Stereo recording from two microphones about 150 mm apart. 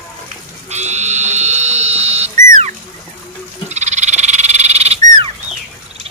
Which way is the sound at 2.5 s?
55° right (ahead or behind).